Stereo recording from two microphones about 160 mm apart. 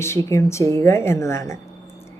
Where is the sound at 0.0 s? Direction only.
15° left (ahead or behind).